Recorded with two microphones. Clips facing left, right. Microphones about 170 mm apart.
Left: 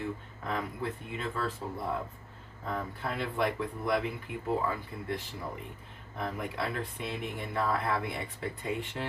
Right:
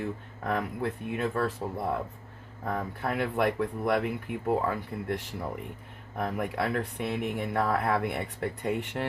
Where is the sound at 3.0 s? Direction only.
65° right (ahead or behind).